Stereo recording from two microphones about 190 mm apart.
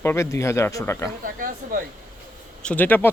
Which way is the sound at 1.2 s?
45° right (ahead or behind).